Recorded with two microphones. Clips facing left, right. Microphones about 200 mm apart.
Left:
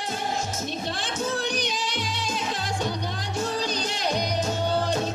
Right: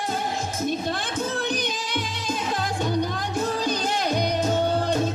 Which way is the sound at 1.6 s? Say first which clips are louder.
Right 1 dB; 50° right (ahead or behind).